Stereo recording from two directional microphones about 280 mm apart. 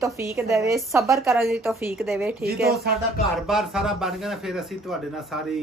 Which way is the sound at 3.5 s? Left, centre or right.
Centre.